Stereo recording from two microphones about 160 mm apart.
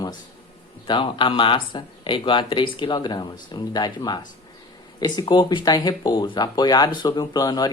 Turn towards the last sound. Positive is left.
turn(degrees=25)  # may be behind; listen again after turning